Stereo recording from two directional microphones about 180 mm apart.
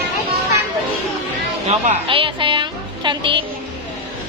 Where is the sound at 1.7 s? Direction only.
35° right (ahead or behind).